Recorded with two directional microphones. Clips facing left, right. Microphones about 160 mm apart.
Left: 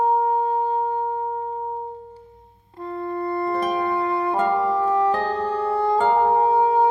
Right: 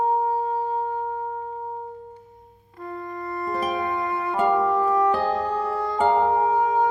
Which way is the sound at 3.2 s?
30° left (ahead or behind).